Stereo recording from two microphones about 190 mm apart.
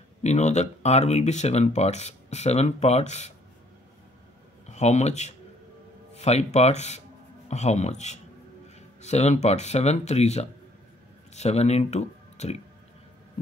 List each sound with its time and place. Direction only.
0.2 s speech: 35° left (ahead or behind)
4.6 s speech: 40° left (ahead or behind)